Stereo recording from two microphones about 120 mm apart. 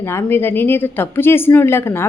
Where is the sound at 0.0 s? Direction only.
20° left (ahead or behind).